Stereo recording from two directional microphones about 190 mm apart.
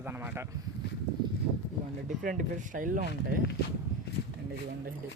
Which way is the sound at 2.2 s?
45° right (ahead or behind).